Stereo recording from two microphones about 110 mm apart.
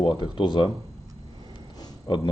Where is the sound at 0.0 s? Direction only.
45° left (ahead or behind).